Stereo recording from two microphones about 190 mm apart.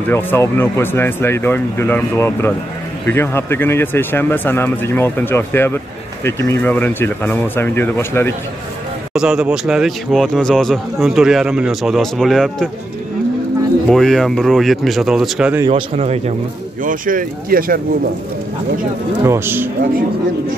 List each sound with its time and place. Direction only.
0.1 s speech: 10° left (ahead or behind)
9.1 s speech: 5° right (ahead or behind)
13.8 s speech: centre (ahead or behind)
15.7 s speech: 35° right (ahead or behind)
16.8 s speech: 45° right (ahead or behind)
19.2 s speech: 15° right (ahead or behind)